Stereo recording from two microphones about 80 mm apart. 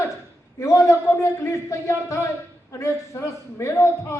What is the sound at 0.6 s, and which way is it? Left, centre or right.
A man's voice, left.